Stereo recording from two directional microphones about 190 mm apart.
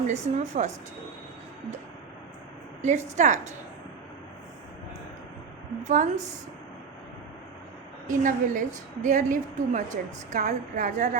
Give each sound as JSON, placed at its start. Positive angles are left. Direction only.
{"t": 0.1, "sound": "a woman's voice", "side_deg": -35}
{"t": 2.8, "sound": "a woman's voice", "side_deg": -40}
{"t": 5.8, "sound": "a woman's voice", "side_deg": -40}
{"t": 8.0, "sound": "a woman's voice", "side_deg": -45}